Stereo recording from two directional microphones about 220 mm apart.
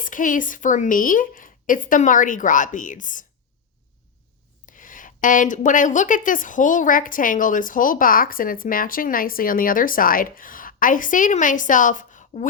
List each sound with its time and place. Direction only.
0.0 s a woman's voice: 35° left (ahead or behind)
4.6 s a woman's voice: 35° left (ahead or behind)